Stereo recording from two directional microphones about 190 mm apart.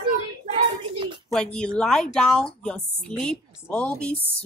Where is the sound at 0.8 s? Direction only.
25° right (ahead or behind).